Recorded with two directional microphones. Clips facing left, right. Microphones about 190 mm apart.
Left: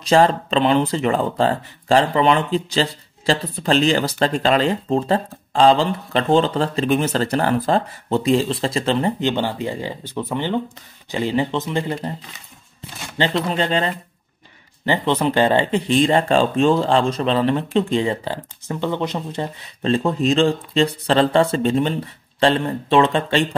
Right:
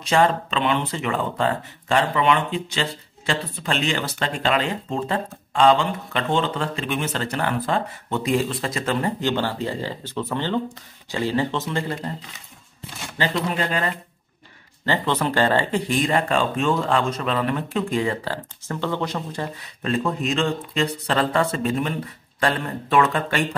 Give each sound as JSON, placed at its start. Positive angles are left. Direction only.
{"t": 0.0, "sound": "speech", "side_deg": 35}
{"t": 13.2, "sound": "speech", "side_deg": 25}